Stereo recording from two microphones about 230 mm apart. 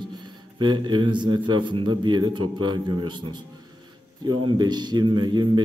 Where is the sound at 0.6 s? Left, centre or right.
Centre.